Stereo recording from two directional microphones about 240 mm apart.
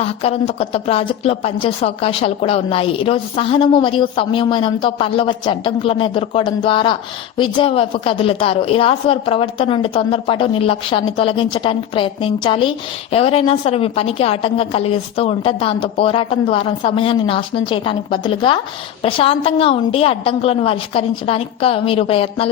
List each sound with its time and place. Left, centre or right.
0.0 s a woman's voice: left